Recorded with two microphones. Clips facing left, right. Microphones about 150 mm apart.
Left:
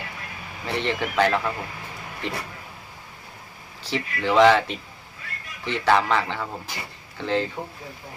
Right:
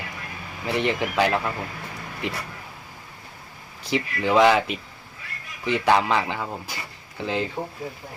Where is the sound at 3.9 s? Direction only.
15° right (ahead or behind).